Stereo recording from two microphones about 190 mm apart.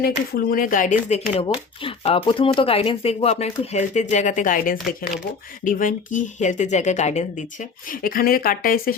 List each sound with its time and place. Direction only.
0.0 s speech: 50° left (ahead or behind)